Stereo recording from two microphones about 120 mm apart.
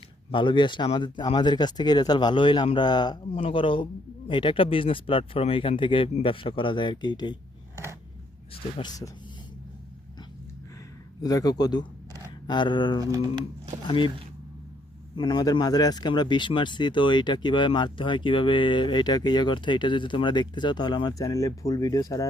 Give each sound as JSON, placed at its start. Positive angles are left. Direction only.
{"t": 0.3, "sound": "speech", "side_deg": 45}
{"t": 11.2, "sound": "speech", "side_deg": 30}
{"t": 13.0, "sound": "speech", "side_deg": -30}
{"t": 13.8, "sound": "speech", "side_deg": 45}
{"t": 15.1, "sound": "speech", "side_deg": 40}